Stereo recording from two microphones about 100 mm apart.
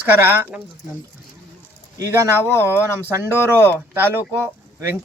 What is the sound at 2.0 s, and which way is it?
Speech, 30° right (ahead or behind).